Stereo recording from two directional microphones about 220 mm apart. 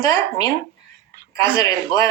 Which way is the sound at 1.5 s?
15° left (ahead or behind).